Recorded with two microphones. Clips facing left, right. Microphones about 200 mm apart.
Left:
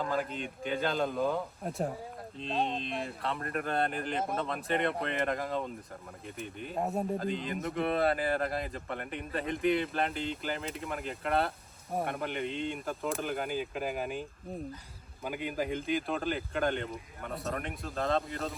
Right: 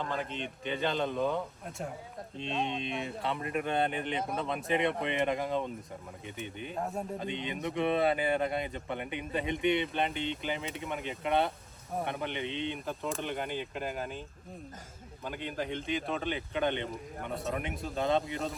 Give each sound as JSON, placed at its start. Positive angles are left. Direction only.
{"t": 0.0, "sound": "speech", "side_deg": 5}
{"t": 6.7, "sound": "speech", "side_deg": 20}
{"t": 7.2, "sound": "speech", "side_deg": 0}